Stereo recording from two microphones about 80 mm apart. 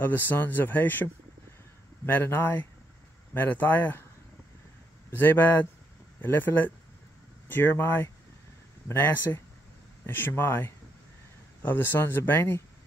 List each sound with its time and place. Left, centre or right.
0.0 s speech: left
5.1 s speech: left